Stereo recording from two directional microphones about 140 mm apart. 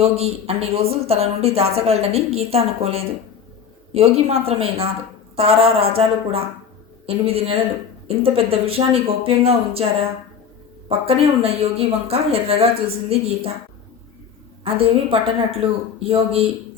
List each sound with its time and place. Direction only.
0.0 s a woman's voice: 45° right (ahead or behind)
10.8 s a woman's voice: 45° right (ahead or behind)
14.6 s a woman's voice: 40° right (ahead or behind)